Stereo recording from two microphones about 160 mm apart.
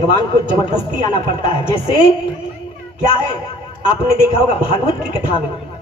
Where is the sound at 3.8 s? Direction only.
35° left (ahead or behind).